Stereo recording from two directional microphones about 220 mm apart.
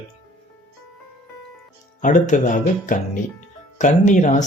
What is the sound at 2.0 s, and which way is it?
Speech, 35° left (ahead or behind).